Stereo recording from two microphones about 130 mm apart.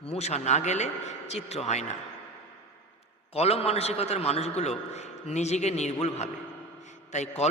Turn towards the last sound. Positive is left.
turn(degrees=60)  # may be behind; listen again after turning